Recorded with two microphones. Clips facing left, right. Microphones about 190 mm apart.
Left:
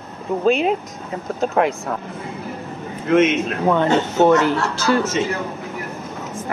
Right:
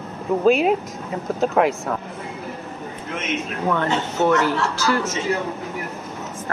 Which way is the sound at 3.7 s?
20° left (ahead or behind).